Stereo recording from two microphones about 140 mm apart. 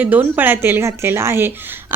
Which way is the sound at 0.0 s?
10° right (ahead or behind).